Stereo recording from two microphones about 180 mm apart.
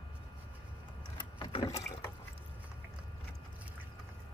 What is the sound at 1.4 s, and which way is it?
Rowboat, 25° left (ahead or behind).